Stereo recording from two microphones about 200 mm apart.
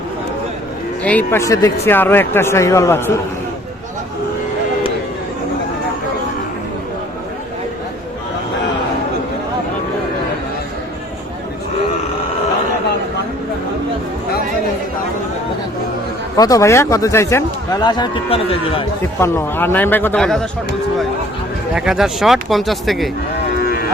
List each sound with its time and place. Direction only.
1.0 s speech: 10° left (ahead or behind)
16.4 s speech: 15° left (ahead or behind)
19.2 s speech: 10° left (ahead or behind)
21.8 s speech: centre (ahead or behind)